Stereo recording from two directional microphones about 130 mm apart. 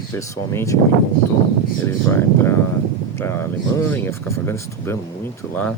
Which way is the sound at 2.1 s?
15° left (ahead or behind).